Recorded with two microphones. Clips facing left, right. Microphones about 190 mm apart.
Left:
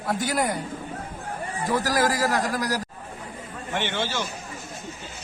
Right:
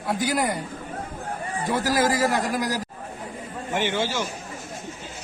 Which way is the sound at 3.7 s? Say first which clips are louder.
Right 3 dB; 10° right (ahead or behind).